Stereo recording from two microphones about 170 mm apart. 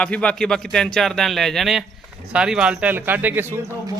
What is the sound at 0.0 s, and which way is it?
A man's voice, 5° left (ahead or behind).